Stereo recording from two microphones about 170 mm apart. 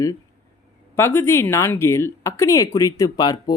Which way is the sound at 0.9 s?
15° left (ahead or behind).